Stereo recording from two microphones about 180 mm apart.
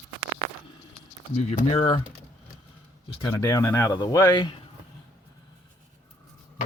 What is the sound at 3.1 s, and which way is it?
Speech, 30° left (ahead or behind).